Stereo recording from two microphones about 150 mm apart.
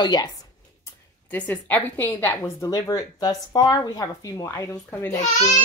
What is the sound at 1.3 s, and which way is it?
A woman's voice, 10° left (ahead or behind).